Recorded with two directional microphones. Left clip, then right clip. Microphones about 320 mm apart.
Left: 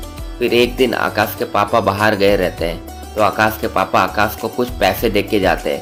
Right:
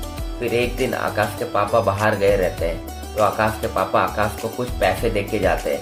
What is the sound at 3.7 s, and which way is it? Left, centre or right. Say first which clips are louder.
Speech: left 4 dB; left.